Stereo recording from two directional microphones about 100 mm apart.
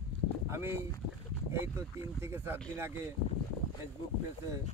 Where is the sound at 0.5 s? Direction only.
25° right (ahead or behind).